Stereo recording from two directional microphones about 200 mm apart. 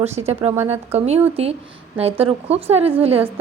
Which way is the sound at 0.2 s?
30° right (ahead or behind).